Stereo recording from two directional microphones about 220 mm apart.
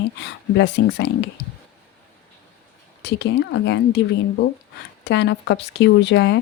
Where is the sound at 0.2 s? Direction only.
50° left (ahead or behind).